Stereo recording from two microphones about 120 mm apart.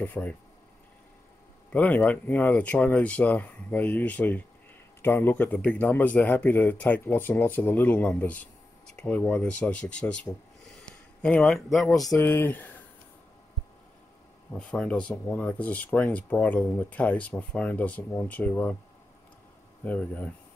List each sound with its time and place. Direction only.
0.0 s speech: 15° left (ahead or behind)
1.7 s speech: 15° left (ahead or behind)
12.2 s speech: 15° left (ahead or behind)
14.5 s speech: 10° left (ahead or behind)
19.8 s speech: 10° left (ahead or behind)